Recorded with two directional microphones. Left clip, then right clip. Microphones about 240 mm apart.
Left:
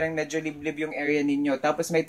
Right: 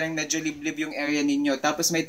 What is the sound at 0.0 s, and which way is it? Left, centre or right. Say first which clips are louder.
Speech: even; left.